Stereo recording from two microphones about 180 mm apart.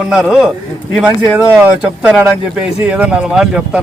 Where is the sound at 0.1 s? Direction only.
5° right (ahead or behind).